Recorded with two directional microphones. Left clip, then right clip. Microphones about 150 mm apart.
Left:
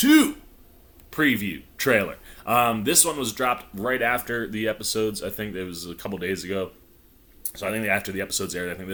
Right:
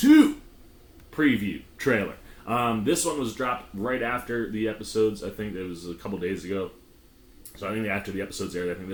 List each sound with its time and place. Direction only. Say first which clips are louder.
1.1 s speech: left 2 dB; 20° left (ahead or behind)